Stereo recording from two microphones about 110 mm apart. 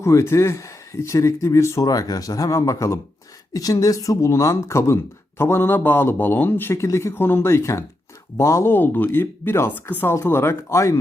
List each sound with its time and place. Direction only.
0.0 s speech: 25° left (ahead or behind)